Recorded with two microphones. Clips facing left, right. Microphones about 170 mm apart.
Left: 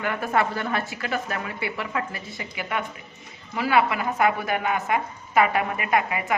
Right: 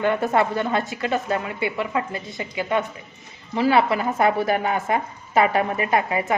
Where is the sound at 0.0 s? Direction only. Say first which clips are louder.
Right 4 dB; 25° right (ahead or behind).